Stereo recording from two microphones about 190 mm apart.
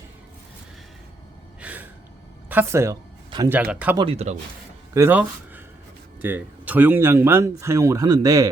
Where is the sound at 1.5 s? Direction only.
10° right (ahead or behind).